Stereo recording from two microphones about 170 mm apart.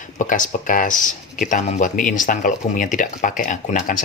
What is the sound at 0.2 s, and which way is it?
Speech, 50° left (ahead or behind).